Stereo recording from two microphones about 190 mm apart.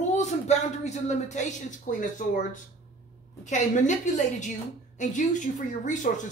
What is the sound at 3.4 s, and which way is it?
Speech, 40° left (ahead or behind).